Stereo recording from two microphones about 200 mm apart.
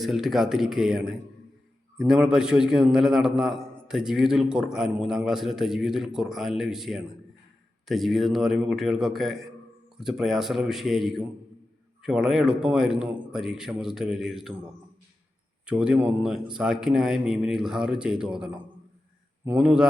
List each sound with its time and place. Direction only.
0.0 s a man's voice: centre (ahead or behind)
15.6 s a man's voice: 5° right (ahead or behind)